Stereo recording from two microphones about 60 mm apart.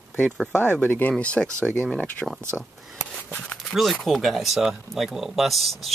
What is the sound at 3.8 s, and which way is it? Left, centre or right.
Speech, centre.